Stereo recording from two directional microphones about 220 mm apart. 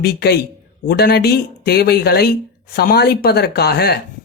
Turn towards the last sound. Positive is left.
turn(degrees=45)  # may be behind; listen again after turning